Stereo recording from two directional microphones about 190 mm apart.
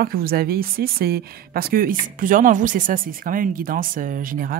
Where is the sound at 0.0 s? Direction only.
50° right (ahead or behind).